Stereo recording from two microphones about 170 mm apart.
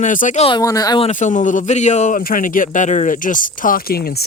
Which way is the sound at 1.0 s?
45° left (ahead or behind).